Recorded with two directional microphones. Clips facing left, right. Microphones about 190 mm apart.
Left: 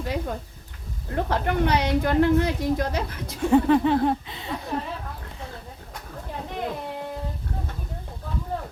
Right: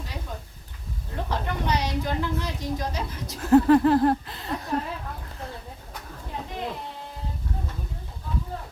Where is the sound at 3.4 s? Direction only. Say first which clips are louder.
Right 2 dB; centre (ahead or behind).